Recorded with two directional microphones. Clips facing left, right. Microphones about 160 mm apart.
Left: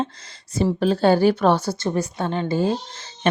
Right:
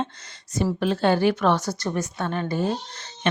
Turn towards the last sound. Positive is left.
turn(degrees=40)  # may be behind; listen again after turning